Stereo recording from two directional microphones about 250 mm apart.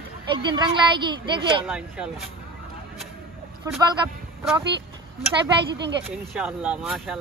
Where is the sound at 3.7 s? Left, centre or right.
Centre.